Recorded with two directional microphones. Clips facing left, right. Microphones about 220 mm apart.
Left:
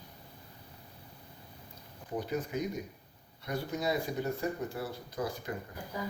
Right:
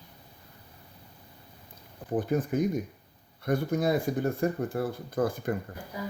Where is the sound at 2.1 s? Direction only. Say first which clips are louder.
Right 7 dB; 50° right (ahead or behind).